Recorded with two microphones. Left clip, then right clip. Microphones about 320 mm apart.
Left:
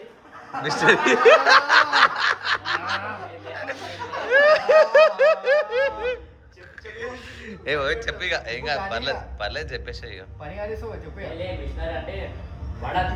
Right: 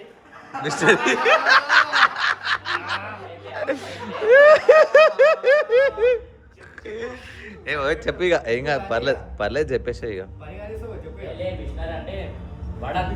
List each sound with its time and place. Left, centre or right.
0.6 s speech: centre
3.5 s snicker: centre
7.0 s a man's voice: centre
7.9 s a man's voice: centre